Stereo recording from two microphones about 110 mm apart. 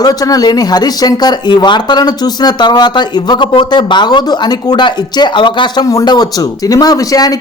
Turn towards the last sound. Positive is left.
turn(degrees=35)  # may be behind; listen again after turning